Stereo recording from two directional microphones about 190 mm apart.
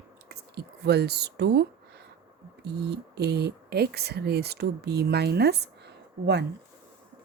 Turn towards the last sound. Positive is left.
turn(degrees=-60)  # may be behind; listen again after turning